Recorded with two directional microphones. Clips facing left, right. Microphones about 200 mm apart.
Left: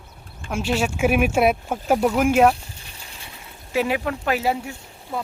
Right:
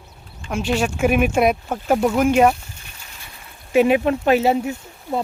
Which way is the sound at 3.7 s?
20° right (ahead or behind).